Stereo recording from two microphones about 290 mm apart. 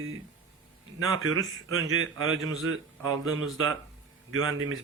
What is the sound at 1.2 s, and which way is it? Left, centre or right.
A man's voice, right.